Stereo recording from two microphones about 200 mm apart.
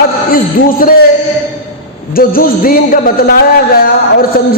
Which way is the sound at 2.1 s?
45° left (ahead or behind).